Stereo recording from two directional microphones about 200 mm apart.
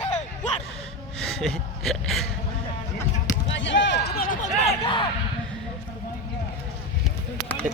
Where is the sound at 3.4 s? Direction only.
65° left (ahead or behind); by 5.0 s 25° left (ahead or behind).